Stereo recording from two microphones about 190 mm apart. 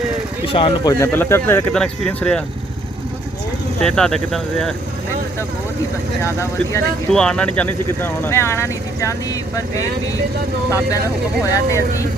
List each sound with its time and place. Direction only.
0.4 s speech: 30° left (ahead or behind)
0.9 s speech: 10° left (ahead or behind)
3.8 s speech: 5° left (ahead or behind)
6.2 s speech: 15° left (ahead or behind)
7.1 s speech: 5° left (ahead or behind)
11.5 s speech: 15° left (ahead or behind)